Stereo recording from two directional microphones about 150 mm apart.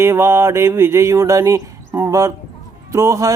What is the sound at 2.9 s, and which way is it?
Speech, 20° right (ahead or behind).